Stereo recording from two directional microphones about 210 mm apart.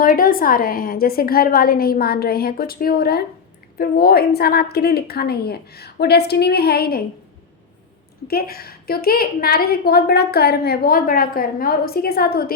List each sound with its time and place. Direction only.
0.0 s a woman's voice: 40° left (ahead or behind)
8.3 s a woman's voice: 45° left (ahead or behind)